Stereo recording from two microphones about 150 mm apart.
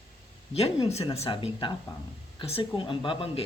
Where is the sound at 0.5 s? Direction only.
40° left (ahead or behind).